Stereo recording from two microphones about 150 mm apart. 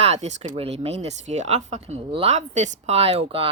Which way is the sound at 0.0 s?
45° right (ahead or behind).